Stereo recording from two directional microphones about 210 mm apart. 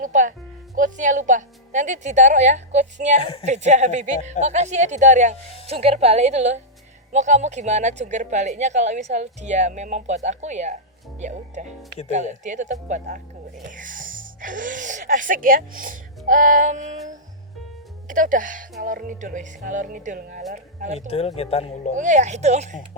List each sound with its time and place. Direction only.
0.0 s a woman's voice: 35° right (ahead or behind)
21.1 s speech: 30° left (ahead or behind)
21.9 s a woman's voice: 35° right (ahead or behind)